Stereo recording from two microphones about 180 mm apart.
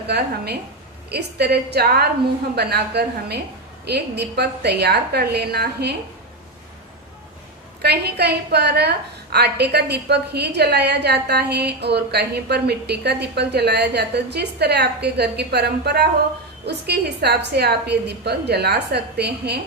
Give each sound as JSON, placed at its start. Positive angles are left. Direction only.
{"t": 1.1, "sound": "a woman's voice", "side_deg": -65}
{"t": 7.8, "sound": "a woman's voice", "side_deg": -65}